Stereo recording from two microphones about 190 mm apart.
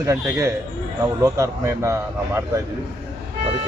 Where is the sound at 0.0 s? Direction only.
15° right (ahead or behind).